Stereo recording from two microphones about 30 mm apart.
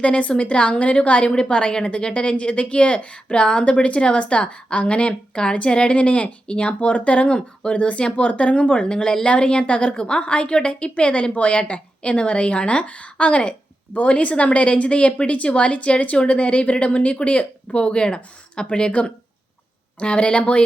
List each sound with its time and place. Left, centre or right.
0.0 s a woman's voice: left
9.3 s a woman's voice: left